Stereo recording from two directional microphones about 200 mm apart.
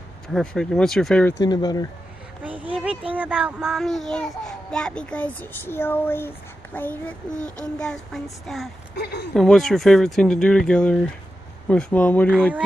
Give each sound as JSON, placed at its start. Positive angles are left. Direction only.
{"t": 0.3, "sound": "speech", "side_deg": 5}
{"t": 1.4, "sound": "speech", "side_deg": 20}
{"t": 2.4, "sound": "speech", "side_deg": -5}
{"t": 8.9, "sound": "speech", "side_deg": 55}
{"t": 9.3, "sound": "speech", "side_deg": 0}